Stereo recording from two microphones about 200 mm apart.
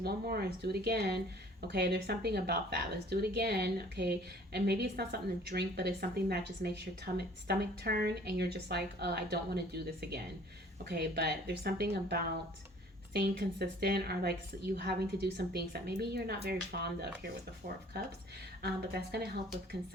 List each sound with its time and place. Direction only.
0.0 s a woman's voice: 50° right (ahead or behind)
18.6 s a woman's voice: 55° right (ahead or behind)